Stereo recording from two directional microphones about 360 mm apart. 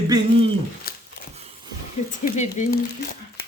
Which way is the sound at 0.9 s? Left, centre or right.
Left.